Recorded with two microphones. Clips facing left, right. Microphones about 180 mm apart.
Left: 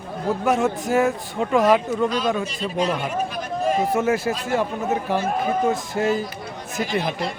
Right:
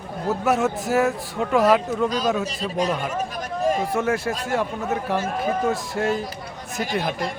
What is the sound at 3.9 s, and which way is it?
Speech, centre (ahead or behind).